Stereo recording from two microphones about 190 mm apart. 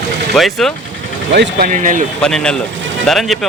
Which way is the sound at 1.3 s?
55° right (ahead or behind).